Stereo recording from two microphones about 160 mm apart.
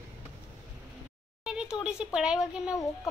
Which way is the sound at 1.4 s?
5° right (ahead or behind).